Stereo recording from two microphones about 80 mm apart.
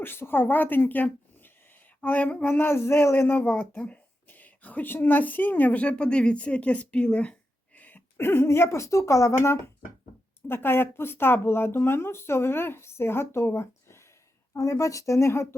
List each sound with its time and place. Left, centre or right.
0.0 s speech: left